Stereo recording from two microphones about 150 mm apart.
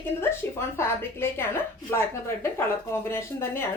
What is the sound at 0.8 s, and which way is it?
Speech, 15° left (ahead or behind).